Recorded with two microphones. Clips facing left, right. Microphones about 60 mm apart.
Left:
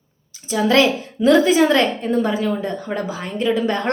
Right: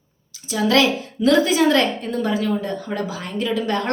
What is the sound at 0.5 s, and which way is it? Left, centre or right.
A woman's voice, left.